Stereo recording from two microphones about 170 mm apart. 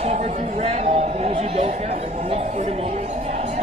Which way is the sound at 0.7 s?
40° right (ahead or behind).